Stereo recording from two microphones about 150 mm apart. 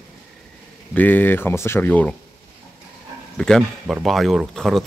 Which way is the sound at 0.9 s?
10° left (ahead or behind).